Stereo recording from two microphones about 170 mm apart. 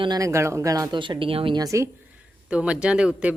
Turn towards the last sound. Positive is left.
turn(degrees=-5)  # may be behind; listen again after turning